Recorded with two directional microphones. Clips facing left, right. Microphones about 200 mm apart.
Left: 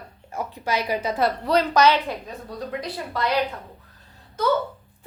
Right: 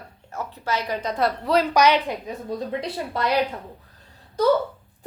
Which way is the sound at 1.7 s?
15° right (ahead or behind).